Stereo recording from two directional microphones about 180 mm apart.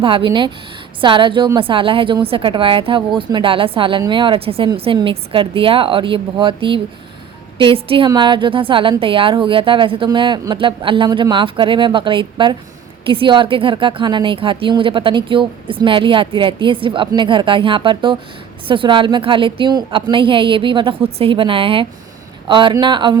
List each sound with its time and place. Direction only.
0.0 s a woman's voice: 30° right (ahead or behind)